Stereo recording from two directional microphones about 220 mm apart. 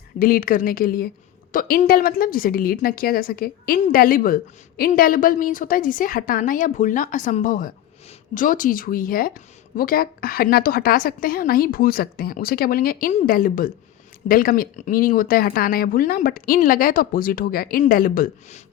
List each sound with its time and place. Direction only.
0.2 s a woman's voice: 40° left (ahead or behind)